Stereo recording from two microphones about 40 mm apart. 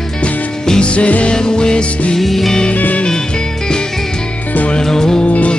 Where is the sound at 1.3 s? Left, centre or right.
Centre.